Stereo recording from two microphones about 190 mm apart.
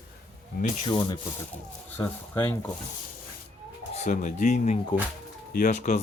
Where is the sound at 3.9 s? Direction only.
40° left (ahead or behind).